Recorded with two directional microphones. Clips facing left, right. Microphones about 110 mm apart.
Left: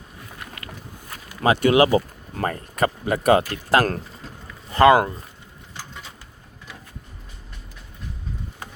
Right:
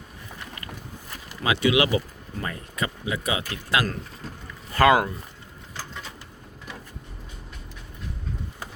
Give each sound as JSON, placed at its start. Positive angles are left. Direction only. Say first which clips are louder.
{"t": 1.4, "sound": "speech", "louder": "left 5 dB", "side_deg": 50}
{"t": 4.7, "sound": "speech", "louder": "left 4 dB", "side_deg": 25}